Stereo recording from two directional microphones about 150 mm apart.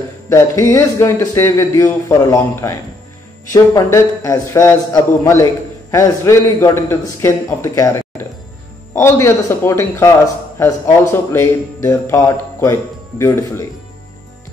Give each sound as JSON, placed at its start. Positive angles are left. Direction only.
{"t": 0.3, "sound": "a man's voice", "side_deg": 20}